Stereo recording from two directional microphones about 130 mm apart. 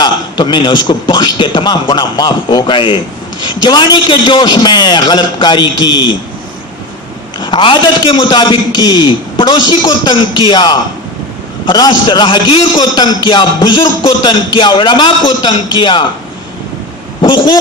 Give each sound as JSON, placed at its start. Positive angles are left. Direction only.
{"t": 0.0, "sound": "a man's voice", "side_deg": 35}
{"t": 7.3, "sound": "a man's voice", "side_deg": 35}
{"t": 17.2, "sound": "speech", "side_deg": 40}